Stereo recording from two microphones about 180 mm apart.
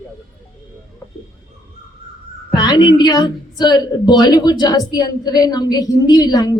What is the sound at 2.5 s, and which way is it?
A woman's voice, 25° left (ahead or behind).